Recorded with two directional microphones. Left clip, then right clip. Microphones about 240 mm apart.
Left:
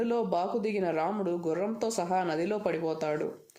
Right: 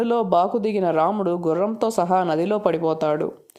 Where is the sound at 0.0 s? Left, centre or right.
Right.